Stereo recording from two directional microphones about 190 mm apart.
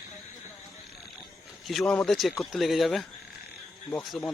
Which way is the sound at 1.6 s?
Centre (ahead or behind).